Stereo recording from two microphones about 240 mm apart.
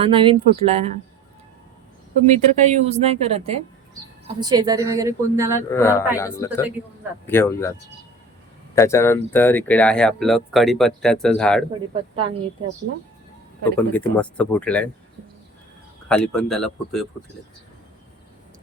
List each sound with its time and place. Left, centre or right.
0.0 s a woman's voice: right
2.2 s a woman's voice: right; by 5.6 s centre
5.7 s speech: centre
8.7 s speech: centre
13.7 s speech: centre
16.0 s speech: centre